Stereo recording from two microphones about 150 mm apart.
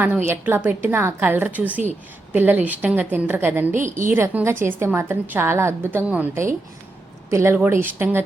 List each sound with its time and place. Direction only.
0.3 s a woman's voice: 15° right (ahead or behind)
3.8 s a woman's voice: 55° right (ahead or behind)
4.1 s a woman's voice: 15° right (ahead or behind)